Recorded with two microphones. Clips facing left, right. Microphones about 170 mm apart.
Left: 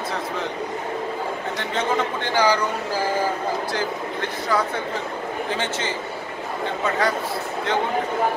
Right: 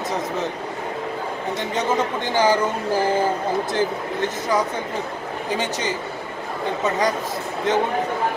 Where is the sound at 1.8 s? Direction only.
20° right (ahead or behind).